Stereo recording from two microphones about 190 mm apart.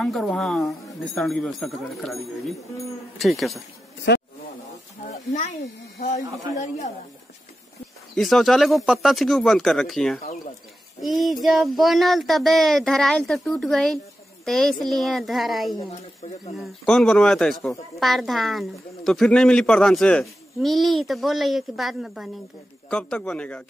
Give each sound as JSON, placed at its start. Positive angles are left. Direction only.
{"t": 0.0, "sound": "speech", "side_deg": 0}
{"t": 5.0, "sound": "a sound", "side_deg": 40}
{"t": 8.1, "sound": "speech", "side_deg": 0}